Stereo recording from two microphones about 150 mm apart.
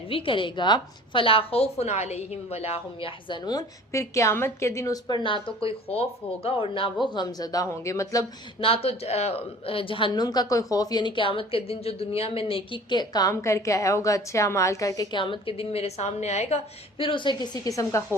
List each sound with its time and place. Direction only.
0.1 s a woman's voice: 35° left (ahead or behind)
8.6 s a woman's voice: 40° left (ahead or behind); by 15.0 s 20° left (ahead or behind)
15.1 s a woman's voice: 35° left (ahead or behind)
17.0 s a woman's voice: 35° left (ahead or behind)